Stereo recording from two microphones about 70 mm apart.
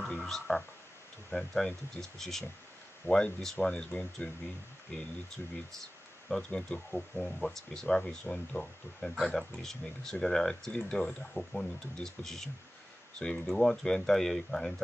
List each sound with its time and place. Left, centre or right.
0.3 s speech: centre
4.9 s speech: centre
9.1 s speech: centre